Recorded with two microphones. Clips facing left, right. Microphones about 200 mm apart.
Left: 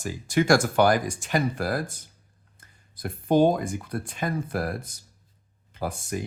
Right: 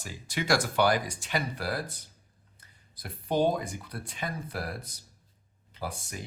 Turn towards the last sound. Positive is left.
turn(degrees=50)  # may be behind; listen again after turning